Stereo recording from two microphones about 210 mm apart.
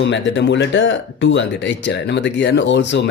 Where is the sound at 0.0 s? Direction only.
60° left (ahead or behind).